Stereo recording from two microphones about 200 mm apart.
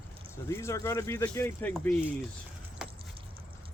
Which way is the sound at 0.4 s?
15° left (ahead or behind).